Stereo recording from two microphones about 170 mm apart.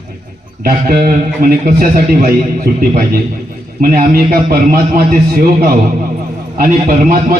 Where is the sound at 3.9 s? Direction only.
60° right (ahead or behind).